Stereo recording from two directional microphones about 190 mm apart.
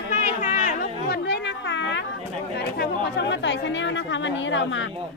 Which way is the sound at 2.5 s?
60° left (ahead or behind).